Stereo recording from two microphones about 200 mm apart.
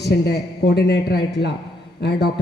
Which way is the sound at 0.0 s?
55° left (ahead or behind).